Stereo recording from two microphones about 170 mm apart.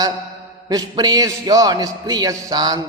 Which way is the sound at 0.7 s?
20° right (ahead or behind).